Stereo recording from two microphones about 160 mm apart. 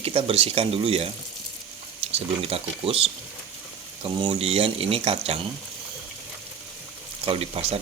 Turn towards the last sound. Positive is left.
turn(degrees=-40)  # may be behind; listen again after turning